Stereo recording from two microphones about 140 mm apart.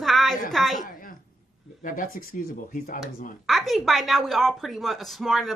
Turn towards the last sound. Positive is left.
turn(degrees=0)  # may be behind; listen again after turning